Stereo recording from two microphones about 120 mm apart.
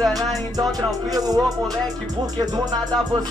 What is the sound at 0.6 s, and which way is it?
Music, 30° right (ahead or behind).